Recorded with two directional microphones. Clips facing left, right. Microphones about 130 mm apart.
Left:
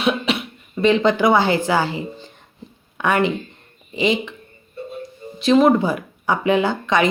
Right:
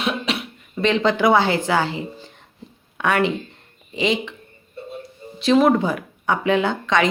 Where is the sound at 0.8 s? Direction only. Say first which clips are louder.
Left 3 dB; centre (ahead or behind).